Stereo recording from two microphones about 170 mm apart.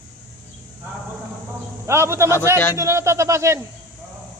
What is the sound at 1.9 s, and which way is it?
Speech, 15° right (ahead or behind).